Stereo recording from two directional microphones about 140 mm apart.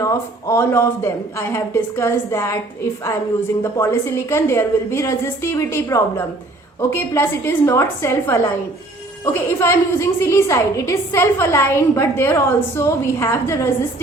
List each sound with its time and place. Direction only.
0.0 s a woman's voice: 20° left (ahead or behind)